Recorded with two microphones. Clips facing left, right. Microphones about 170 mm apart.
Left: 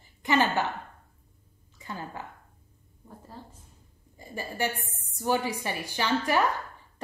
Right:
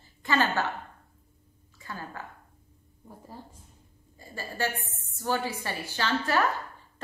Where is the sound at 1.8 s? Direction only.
20° left (ahead or behind).